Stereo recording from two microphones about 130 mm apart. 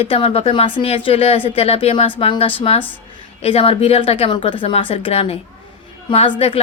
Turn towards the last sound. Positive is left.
turn(degrees=45)  # may be behind; listen again after turning